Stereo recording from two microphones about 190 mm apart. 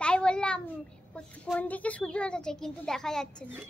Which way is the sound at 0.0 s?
5° left (ahead or behind).